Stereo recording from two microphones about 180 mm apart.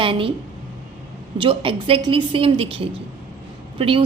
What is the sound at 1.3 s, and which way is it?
A woman's voice, 30° right (ahead or behind).